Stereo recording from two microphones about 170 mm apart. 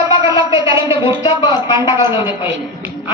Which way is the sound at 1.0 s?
25° left (ahead or behind).